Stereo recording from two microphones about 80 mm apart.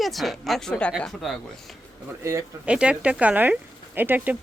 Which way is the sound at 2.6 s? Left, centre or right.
Centre.